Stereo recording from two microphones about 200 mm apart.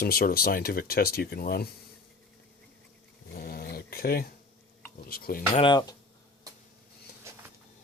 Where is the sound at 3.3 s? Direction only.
50° left (ahead or behind).